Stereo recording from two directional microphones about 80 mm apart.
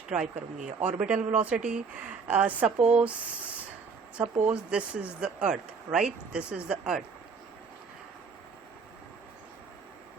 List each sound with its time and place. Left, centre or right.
0.1 s speech: centre